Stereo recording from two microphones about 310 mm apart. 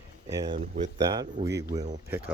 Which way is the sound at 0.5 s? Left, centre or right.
Right.